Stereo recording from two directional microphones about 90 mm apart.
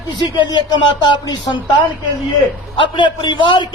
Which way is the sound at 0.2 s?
60° left (ahead or behind).